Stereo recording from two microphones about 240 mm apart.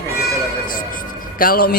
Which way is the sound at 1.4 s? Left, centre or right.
Left.